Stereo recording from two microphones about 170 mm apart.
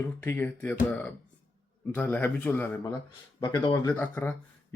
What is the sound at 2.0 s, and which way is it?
Speech, 10° left (ahead or behind).